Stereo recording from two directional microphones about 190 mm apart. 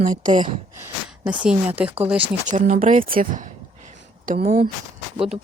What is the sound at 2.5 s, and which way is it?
Speech, 40° right (ahead or behind).